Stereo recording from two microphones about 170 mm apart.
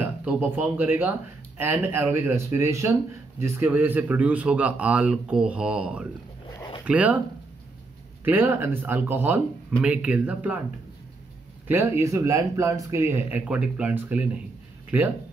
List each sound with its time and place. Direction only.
0.0 s speech: 10° right (ahead or behind)
6.5 s a sound: 25° left (ahead or behind)
6.8 s speech: 10° right (ahead or behind)
8.3 s speech: 10° right (ahead or behind)
11.6 s speech: 15° right (ahead or behind)